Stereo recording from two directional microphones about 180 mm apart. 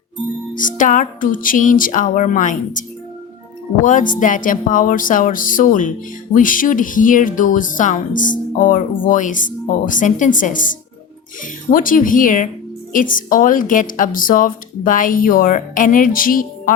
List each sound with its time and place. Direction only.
0.5 s speech: 45° left (ahead or behind)
3.8 s speech: 45° left (ahead or behind)
11.7 s speech: 50° left (ahead or behind)